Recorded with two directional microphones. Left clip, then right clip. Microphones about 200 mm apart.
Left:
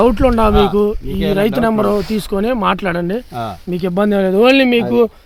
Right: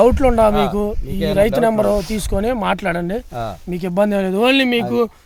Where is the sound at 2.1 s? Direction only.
30° right (ahead or behind).